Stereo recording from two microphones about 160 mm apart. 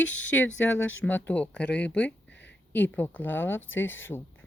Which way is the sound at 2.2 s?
90° left.